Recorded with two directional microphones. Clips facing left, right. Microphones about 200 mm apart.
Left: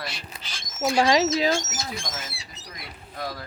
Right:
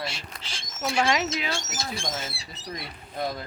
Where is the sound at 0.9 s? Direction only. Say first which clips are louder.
Left 4 dB; 30° left (ahead or behind).